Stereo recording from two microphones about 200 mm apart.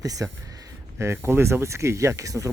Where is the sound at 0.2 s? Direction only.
15° right (ahead or behind).